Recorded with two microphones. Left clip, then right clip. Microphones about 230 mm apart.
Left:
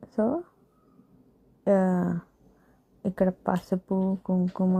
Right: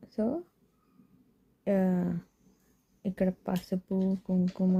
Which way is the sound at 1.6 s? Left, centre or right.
Centre.